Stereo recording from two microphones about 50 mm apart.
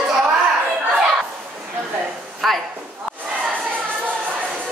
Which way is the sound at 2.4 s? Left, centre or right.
Centre.